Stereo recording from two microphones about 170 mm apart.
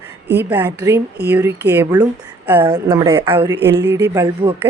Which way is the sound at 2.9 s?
25° right (ahead or behind).